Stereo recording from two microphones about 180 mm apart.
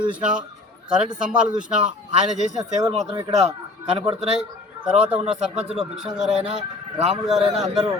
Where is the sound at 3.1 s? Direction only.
30° right (ahead or behind).